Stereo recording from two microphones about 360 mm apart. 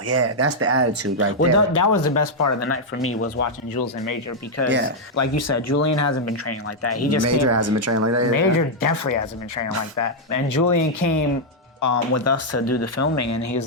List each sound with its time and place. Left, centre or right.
0.1 s speech: right
1.4 s speech: left
3.8 s speech: left
4.6 s speech: left
7.3 s speech: right
8.4 s speech: left